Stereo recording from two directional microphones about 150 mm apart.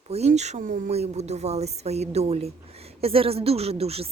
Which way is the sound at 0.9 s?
45° right (ahead or behind).